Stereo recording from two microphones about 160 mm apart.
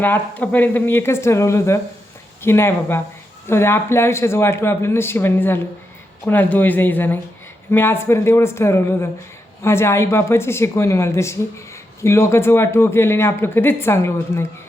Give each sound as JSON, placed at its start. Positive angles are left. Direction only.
{"t": 0.0, "sound": "a man's voice", "side_deg": 10}